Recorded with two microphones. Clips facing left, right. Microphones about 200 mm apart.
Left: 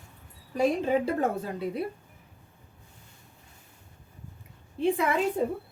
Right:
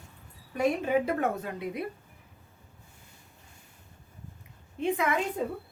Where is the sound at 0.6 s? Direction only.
30° left (ahead or behind).